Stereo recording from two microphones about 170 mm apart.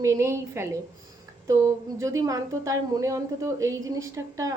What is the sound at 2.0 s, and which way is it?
A woman's voice, 20° right (ahead or behind).